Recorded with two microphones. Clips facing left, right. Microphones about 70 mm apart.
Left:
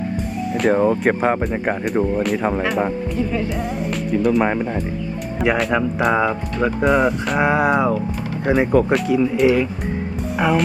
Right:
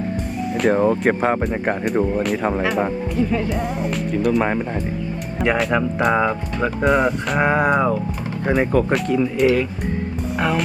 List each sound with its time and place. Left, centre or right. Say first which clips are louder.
0.5 s speech: left 1 dB; centre